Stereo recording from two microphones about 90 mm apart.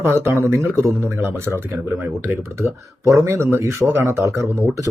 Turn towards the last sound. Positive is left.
turn(degrees=-25)  # may be behind; listen again after turning